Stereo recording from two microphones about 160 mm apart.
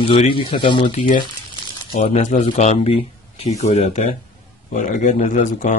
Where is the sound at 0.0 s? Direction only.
35° left (ahead or behind).